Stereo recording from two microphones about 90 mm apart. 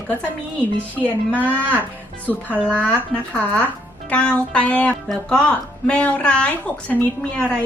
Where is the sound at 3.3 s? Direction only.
15° left (ahead or behind).